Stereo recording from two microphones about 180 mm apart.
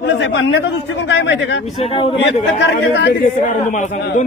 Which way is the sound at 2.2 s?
70° left (ahead or behind).